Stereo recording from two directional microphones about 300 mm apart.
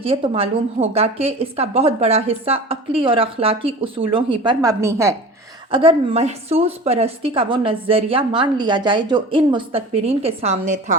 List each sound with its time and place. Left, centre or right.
0.0 s a woman's voice: centre